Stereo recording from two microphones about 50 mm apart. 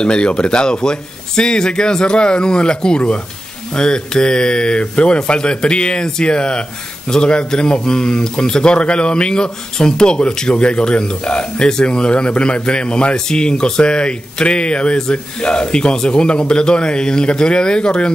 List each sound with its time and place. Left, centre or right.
0.0 s speech: centre